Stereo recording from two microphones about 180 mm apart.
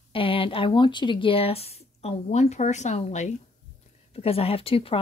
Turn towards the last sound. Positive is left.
turn(degrees=30)  # may be behind; listen again after turning